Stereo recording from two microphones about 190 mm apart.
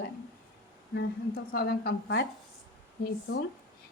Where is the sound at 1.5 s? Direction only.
55° left (ahead or behind).